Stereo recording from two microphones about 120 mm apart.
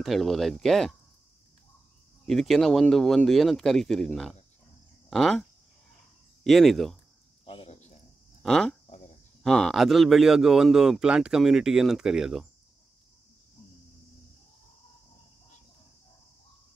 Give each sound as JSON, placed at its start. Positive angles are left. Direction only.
{"t": 0.0, "sound": "a man's voice", "side_deg": 0}
{"t": 2.2, "sound": "a man's voice", "side_deg": 0}
{"t": 6.4, "sound": "a man's voice", "side_deg": 0}
{"t": 7.4, "sound": "a sound", "side_deg": 50}
{"t": 8.4, "sound": "a man's voice", "side_deg": 5}